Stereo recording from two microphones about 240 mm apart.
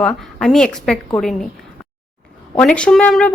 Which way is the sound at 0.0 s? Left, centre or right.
Centre.